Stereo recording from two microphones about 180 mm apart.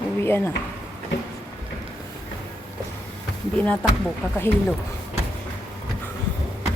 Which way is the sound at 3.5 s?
5° left (ahead or behind).